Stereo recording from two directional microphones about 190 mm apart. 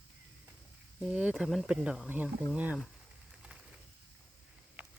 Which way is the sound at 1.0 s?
5° right (ahead or behind).